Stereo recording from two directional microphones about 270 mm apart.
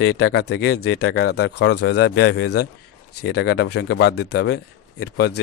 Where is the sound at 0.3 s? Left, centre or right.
Left.